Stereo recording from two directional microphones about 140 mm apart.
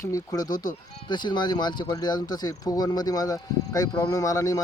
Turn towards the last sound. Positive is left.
turn(degrees=25)  # may be behind; listen again after turning